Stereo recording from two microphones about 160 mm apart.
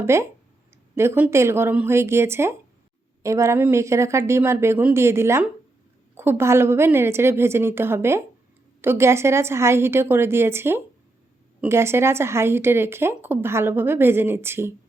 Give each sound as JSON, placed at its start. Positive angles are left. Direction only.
{"t": 0.0, "sound": "speech", "side_deg": -15}